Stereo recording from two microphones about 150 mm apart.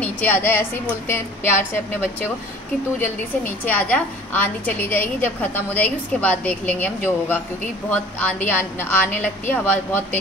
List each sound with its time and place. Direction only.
0.0 s a woman's voice: 15° left (ahead or behind)
3.0 s a woman's voice: 15° left (ahead or behind)